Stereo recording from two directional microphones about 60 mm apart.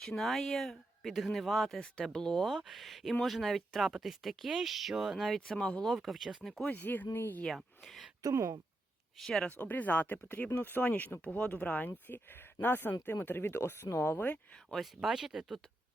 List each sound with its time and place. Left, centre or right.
0.0 s speech: centre
5.5 s speech: centre
5.8 s speech: centre
6.7 s speech: left
7.5 s speech: centre
8.3 s speech: right
9.1 s speech: centre
9.4 s speech: left
11.2 s speech: centre; by 14.3 s left
14.7 s speech: centre